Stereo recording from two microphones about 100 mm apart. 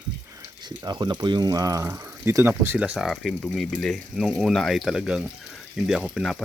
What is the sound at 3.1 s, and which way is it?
Speech, centre (ahead or behind).